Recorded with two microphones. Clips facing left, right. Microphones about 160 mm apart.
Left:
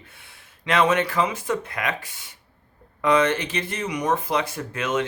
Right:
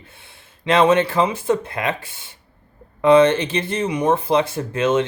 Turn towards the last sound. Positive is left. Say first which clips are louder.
# right 7 dB
turn(degrees=-30)  # may be behind; listen again after turning